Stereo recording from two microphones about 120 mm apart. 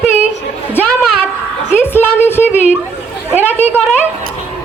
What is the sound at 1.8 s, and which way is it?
Speech, 15° left (ahead or behind).